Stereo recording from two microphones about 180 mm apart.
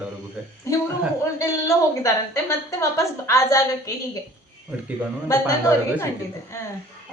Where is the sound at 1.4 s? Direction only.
15° left (ahead or behind).